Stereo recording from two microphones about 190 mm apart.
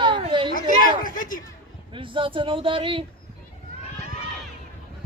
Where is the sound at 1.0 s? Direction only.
45° left (ahead or behind).